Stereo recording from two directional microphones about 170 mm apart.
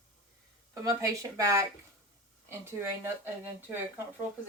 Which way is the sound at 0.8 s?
20° right (ahead or behind).